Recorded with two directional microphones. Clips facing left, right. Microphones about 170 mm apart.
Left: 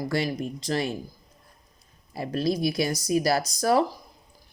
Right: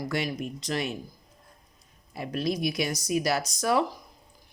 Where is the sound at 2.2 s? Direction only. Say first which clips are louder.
Left 3 dB; 35° left (ahead or behind).